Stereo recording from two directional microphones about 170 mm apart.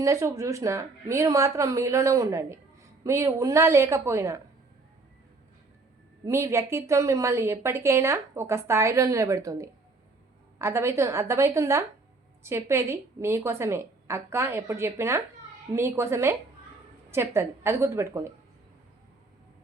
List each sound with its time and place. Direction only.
0.0 s a woman's voice: 15° right (ahead or behind)
6.2 s a woman's voice: 15° right (ahead or behind)